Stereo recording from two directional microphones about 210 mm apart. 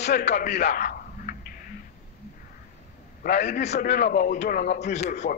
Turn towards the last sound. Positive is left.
turn(degrees=35)  # may be behind; listen again after turning